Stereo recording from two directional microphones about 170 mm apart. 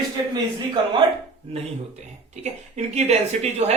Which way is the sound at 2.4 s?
40° right (ahead or behind).